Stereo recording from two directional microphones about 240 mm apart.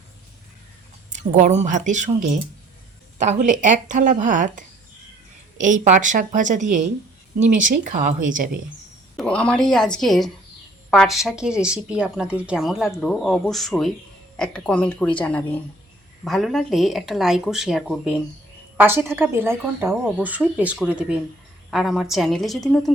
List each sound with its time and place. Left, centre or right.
1.1 s a woman's voice: right
9.1 s a woman's voice: centre